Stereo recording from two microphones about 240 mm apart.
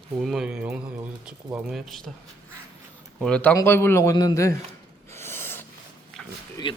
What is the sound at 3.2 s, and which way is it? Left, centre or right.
A man's voice, centre.